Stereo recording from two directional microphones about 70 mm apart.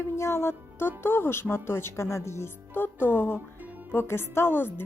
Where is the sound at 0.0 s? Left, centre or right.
Left.